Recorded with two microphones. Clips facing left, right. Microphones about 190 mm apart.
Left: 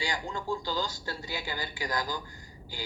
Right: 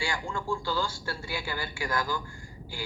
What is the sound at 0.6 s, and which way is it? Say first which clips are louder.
A woman's voice: right 2 dB; 20° left (ahead or behind).